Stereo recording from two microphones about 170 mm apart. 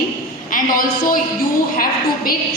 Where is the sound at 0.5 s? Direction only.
55° left (ahead or behind).